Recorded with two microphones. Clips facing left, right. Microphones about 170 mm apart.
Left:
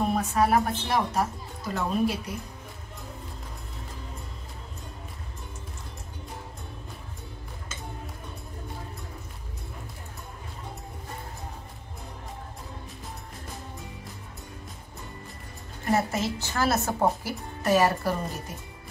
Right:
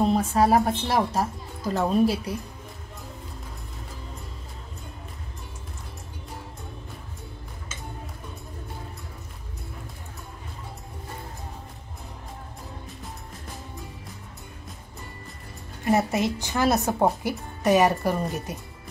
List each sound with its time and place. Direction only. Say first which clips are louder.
0.1 s a woman's voice: right 3 dB; 30° right (ahead or behind)
15.8 s speech: right 3 dB; 20° right (ahead or behind)